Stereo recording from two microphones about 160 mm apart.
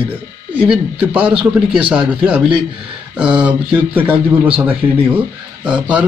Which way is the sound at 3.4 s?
10° right (ahead or behind).